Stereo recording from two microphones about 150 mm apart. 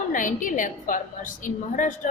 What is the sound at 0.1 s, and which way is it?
A woman's voice, 60° left (ahead or behind).